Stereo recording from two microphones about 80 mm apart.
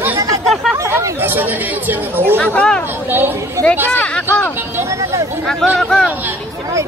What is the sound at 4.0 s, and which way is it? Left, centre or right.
Speech, centre.